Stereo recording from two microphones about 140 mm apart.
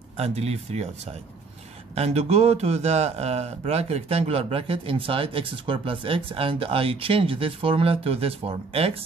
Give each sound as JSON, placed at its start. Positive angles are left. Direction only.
{"t": 0.2, "sound": "a man's voice", "side_deg": -50}